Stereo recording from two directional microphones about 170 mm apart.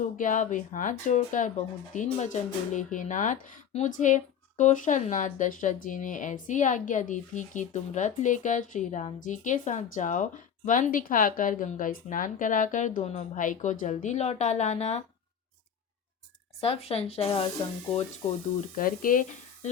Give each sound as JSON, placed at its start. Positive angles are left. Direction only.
{"t": 0.0, "sound": "speech", "side_deg": 50}
{"t": 16.6, "sound": "speech", "side_deg": 35}
{"t": 18.8, "sound": "speech", "side_deg": 55}